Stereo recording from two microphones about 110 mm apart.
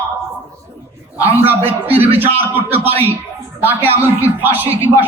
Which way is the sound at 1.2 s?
20° right (ahead or behind).